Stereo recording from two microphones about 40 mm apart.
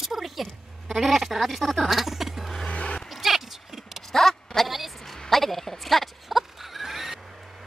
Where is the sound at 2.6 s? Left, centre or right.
Left.